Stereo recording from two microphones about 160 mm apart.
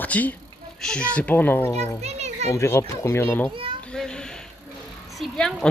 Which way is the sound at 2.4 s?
15° left (ahead or behind).